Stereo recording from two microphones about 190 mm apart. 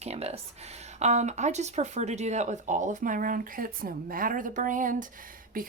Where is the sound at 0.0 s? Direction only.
35° right (ahead or behind).